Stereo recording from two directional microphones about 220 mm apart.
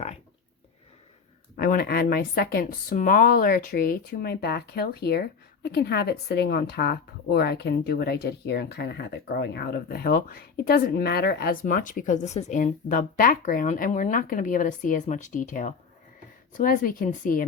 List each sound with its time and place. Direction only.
1.5 s speech: 45° left (ahead or behind)